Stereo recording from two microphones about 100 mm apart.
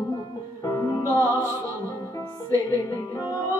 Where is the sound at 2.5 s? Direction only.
35° left (ahead or behind).